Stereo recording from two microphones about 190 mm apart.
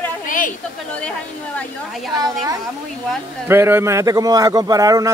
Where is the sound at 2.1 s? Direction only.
20° right (ahead or behind).